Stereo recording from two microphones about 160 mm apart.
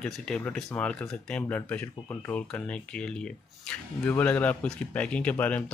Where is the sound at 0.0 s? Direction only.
5° left (ahead or behind).